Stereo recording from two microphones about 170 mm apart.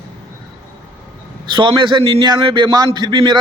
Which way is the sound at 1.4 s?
25° right (ahead or behind).